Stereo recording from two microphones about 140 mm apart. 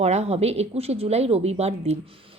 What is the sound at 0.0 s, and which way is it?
Speech, 50° right (ahead or behind).